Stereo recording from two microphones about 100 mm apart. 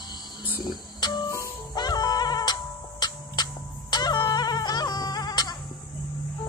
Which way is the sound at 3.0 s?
45° left (ahead or behind).